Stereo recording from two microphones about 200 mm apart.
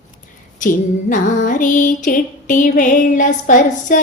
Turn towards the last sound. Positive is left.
turn(degrees=40)  # may be behind; listen again after turning